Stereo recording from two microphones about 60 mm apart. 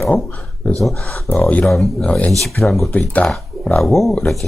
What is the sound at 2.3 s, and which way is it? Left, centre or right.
Speech, centre.